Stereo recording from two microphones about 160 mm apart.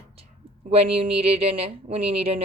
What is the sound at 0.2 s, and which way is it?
A woman's voice, 40° right (ahead or behind).